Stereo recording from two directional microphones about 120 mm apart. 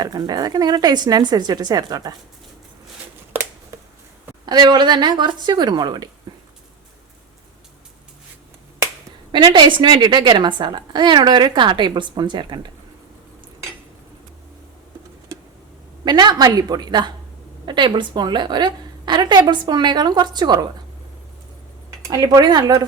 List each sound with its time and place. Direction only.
0.0 s a woman's voice: 35° right (ahead or behind)
3.7 s a sound: 25° right (ahead or behind)
4.4 s a woman's voice: 35° right (ahead or behind)
9.3 s a woman's voice: 40° right (ahead or behind)
16.0 s a woman's voice: 35° right (ahead or behind)
21.8 s speech: 30° right (ahead or behind)